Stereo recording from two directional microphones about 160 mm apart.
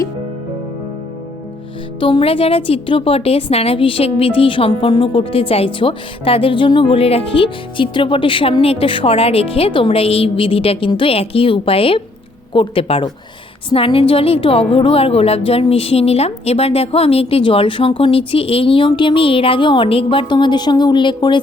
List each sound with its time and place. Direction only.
2.0 s a woman's voice: 30° left (ahead or behind)